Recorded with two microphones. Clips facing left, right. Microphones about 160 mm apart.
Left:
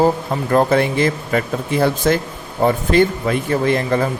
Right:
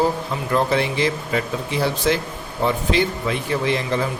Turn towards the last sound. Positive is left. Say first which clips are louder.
# left 5 dB
turn(degrees=50)  # may be behind; listen again after turning